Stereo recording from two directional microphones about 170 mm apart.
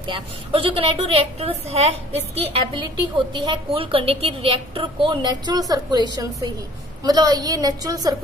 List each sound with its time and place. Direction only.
0.0 s a woman's voice: 30° right (ahead or behind)